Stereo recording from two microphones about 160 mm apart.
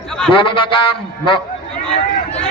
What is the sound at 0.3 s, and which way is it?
A man's voice, 30° left (ahead or behind).